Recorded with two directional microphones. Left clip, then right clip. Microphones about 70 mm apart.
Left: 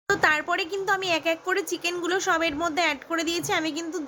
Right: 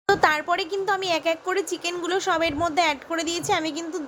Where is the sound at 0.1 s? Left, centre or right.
Right.